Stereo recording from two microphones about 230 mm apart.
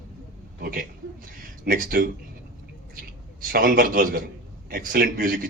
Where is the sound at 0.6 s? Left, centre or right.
Right.